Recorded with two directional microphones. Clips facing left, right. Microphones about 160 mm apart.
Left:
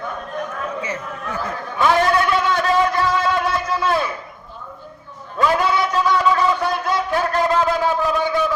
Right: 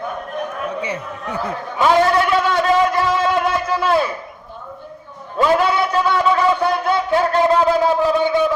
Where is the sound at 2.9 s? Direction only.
20° right (ahead or behind).